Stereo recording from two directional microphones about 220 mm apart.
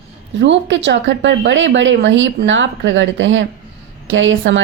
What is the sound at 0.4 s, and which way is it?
Speech, 55° right (ahead or behind).